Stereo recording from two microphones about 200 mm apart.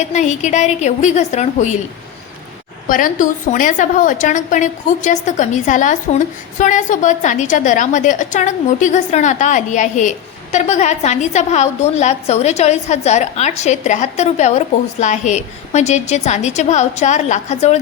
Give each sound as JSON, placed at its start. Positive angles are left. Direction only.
{"t": 0.0, "sound": "a woman's voice", "side_deg": 35}
{"t": 2.9, "sound": "a woman's voice", "side_deg": 40}